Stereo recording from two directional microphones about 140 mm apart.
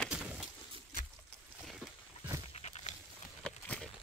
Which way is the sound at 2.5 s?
50° left (ahead or behind).